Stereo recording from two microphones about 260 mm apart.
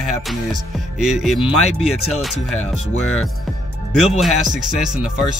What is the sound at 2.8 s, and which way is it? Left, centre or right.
Speech, left.